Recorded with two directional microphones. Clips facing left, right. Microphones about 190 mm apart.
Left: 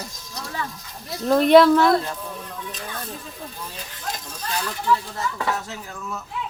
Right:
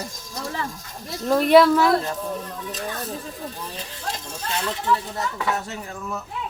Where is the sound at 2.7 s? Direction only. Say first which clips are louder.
Right 6 dB; 40° right (ahead or behind).